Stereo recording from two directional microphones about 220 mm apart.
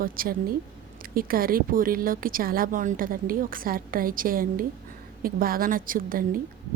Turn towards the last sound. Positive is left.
turn(degrees=-40)  # may be behind; listen again after turning